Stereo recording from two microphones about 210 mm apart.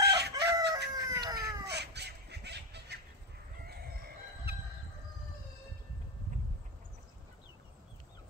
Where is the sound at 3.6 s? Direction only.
45° right (ahead or behind).